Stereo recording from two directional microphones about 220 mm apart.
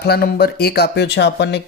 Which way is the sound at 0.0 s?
45° left (ahead or behind).